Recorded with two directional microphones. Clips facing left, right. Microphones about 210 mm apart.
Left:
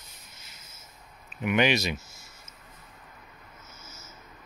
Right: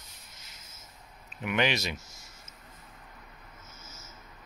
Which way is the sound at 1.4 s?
15° left (ahead or behind).